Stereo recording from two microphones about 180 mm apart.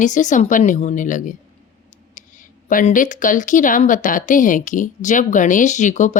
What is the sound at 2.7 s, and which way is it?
Speech, 50° left (ahead or behind).